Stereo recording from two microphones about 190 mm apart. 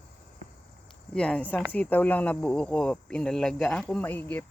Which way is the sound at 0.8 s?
5° left (ahead or behind).